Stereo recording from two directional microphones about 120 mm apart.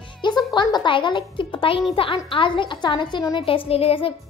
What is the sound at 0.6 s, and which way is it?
A woman's voice, 40° left (ahead or behind).